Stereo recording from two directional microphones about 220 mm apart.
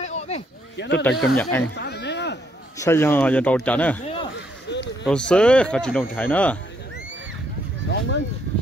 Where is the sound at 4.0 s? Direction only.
25° left (ahead or behind).